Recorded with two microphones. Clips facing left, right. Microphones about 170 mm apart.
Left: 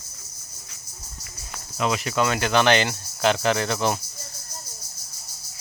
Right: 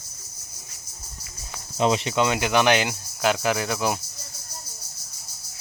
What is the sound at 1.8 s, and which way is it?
Cricket, 30° right (ahead or behind).